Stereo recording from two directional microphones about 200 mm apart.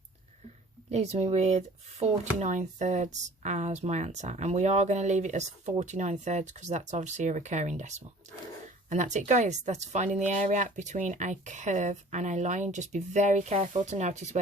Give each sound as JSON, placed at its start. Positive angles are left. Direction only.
{"t": 0.9, "sound": "speech", "side_deg": -30}